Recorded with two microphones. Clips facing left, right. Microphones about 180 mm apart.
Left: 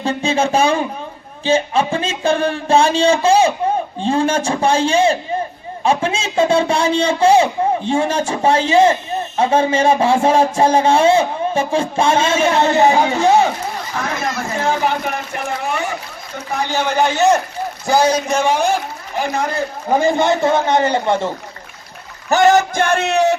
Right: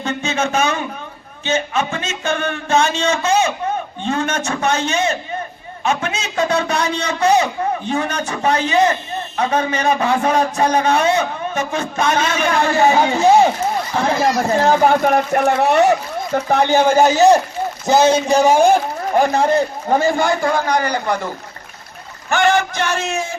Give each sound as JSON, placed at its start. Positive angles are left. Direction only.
{"t": 0.0, "sound": "a man's voice", "side_deg": 30}
{"t": 13.9, "sound": "speech", "side_deg": -30}
{"t": 15.4, "sound": "speech", "side_deg": -70}
{"t": 17.8, "sound": "speech", "side_deg": -25}
{"t": 19.9, "sound": "a man's voice", "side_deg": 15}
{"t": 22.3, "sound": "a sound", "side_deg": 40}